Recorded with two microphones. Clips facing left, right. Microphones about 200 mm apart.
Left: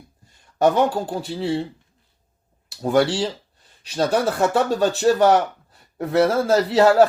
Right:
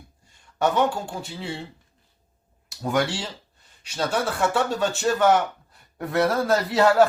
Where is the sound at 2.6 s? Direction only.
35° left (ahead or behind).